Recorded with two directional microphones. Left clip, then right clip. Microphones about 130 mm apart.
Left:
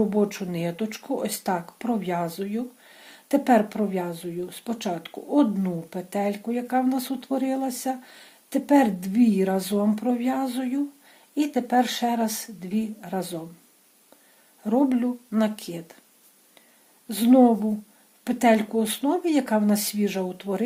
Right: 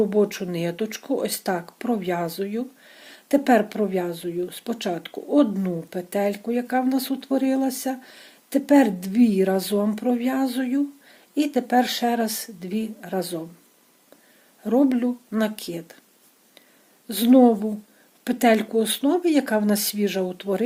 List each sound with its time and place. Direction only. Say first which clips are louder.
0.1 s speech: right 3 dB; 35° right (ahead or behind)
14.6 s speech: right 2 dB; 35° right (ahead or behind)
17.1 s speech: right 2 dB; 35° right (ahead or behind)